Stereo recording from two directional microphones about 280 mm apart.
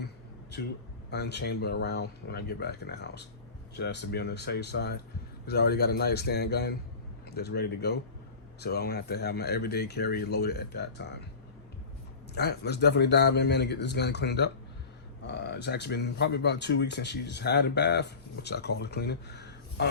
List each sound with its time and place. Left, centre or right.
1.1 s speech: left
12.3 s speech: left